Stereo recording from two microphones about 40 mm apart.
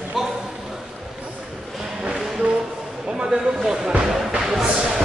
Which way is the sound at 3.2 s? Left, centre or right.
Centre.